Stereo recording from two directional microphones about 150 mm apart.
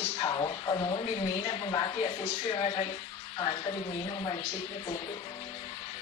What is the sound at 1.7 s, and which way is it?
Speech, 25° left (ahead or behind).